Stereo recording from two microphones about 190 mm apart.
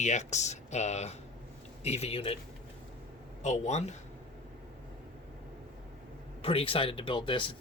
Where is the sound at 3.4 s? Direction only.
40° left (ahead or behind).